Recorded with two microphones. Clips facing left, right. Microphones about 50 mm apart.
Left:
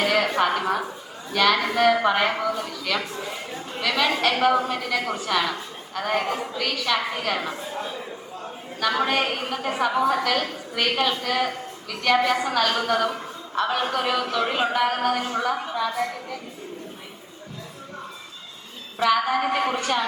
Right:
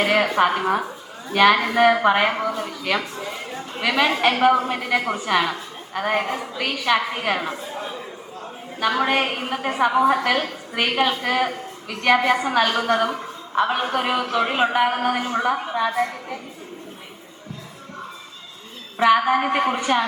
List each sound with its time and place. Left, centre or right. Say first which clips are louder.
0.0 s a woman's voice: right 3 dB; centre
3.8 s a woman's voice: right 3 dB; right
6.3 s a woman's voice: even; centre
6.6 s a woman's voice: right 6 dB; centre
18.9 s a woman's voice: right 4 dB; right